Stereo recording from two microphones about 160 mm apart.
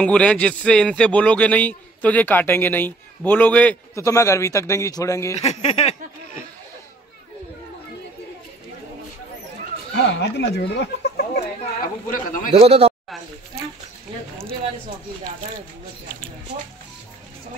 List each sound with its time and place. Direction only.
0.0 s speech: 5° left (ahead or behind)
5.4 s a sound: 40° left (ahead or behind)
9.9 s speech: 90° left
12.1 s a man's voice: 55° left (ahead or behind)
12.5 s a man's voice: 35° right (ahead or behind)